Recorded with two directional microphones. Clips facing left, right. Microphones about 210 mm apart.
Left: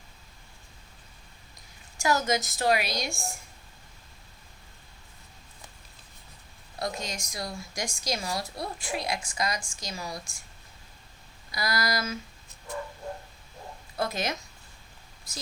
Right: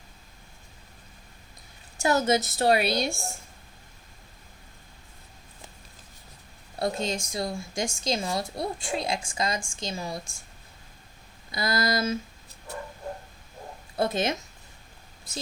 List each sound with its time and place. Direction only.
2.0 s speech: 30° right (ahead or behind)
6.7 s speech: 30° right (ahead or behind)
11.5 s speech: 25° right (ahead or behind)
13.9 s speech: 25° right (ahead or behind)